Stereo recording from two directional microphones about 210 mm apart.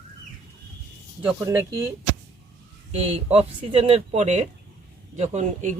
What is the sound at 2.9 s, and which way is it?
Speech, 30° right (ahead or behind).